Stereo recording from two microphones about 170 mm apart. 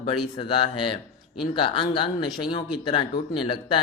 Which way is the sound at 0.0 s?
30° left (ahead or behind).